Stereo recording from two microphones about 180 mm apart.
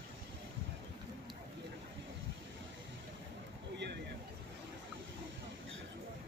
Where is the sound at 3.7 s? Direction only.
70° right (ahead or behind).